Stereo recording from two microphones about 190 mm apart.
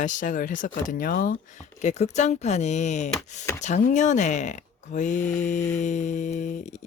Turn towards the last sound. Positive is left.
turn(degrees=40)  # may be behind; listen again after turning